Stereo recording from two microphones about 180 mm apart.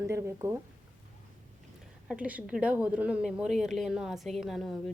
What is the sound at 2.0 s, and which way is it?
A woman's voice, 5° right (ahead or behind).